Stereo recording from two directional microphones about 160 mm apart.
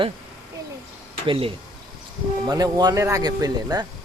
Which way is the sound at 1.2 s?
35° right (ahead or behind).